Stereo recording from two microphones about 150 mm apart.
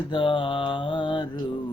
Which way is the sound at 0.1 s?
35° left (ahead or behind).